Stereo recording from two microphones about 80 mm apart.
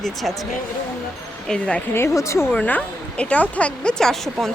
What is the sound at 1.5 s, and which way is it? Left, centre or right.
Speech, centre.